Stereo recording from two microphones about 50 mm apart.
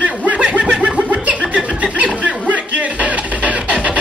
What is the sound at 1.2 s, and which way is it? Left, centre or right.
Chuckle, right.